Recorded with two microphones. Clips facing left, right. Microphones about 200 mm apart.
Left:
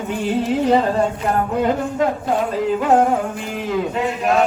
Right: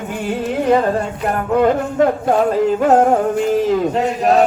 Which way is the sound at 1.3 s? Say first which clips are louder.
Right 7 dB; 55° right (ahead or behind).